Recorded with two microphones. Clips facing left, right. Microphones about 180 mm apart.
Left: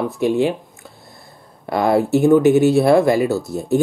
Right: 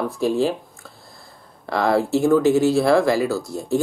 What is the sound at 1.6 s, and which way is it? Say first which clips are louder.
Speech: left 3 dB; 20° left (ahead or behind).